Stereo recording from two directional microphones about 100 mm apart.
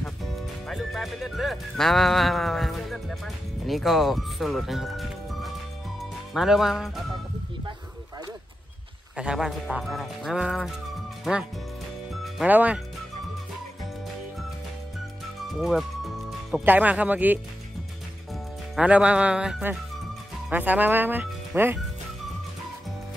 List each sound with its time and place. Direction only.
0.0 s speech: centre (ahead or behind)
5.9 s music: 5° right (ahead or behind)
9.1 s speech: 10° right (ahead or behind)
12.1 s music: centre (ahead or behind)
12.4 s speech: 15° right (ahead or behind)
15.5 s speech: centre (ahead or behind)
16.3 s music: centre (ahead or behind)
16.6 s speech: 15° right (ahead or behind)
18.8 s speech: 10° right (ahead or behind)